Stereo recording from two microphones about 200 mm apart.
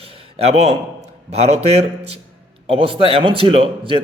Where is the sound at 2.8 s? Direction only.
25° right (ahead or behind).